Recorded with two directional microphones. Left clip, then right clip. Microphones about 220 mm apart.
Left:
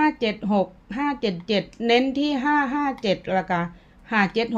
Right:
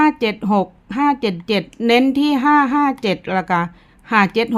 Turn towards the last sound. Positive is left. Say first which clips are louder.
# right 7 dB
turn(degrees=-25)  # may be behind; listen again after turning